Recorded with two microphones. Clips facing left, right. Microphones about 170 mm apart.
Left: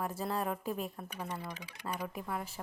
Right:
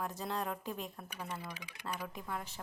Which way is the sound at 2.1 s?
5° left (ahead or behind).